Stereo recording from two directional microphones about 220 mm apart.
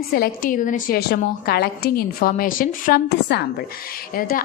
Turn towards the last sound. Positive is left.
turn(degrees=40)  # may be behind; listen again after turning